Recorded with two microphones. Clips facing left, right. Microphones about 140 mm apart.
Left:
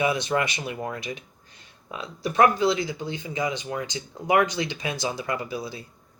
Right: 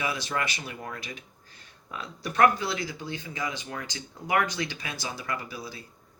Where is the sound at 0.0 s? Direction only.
20° left (ahead or behind).